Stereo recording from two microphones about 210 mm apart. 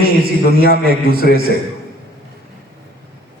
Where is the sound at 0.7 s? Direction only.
45° right (ahead or behind).